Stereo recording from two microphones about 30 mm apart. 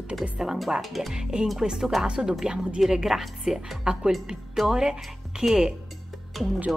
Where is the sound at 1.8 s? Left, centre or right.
Centre.